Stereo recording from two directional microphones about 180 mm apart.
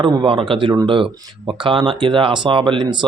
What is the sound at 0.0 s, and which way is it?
Speech, 30° right (ahead or behind).